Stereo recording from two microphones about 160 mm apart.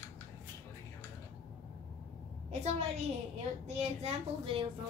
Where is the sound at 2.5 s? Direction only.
45° right (ahead or behind).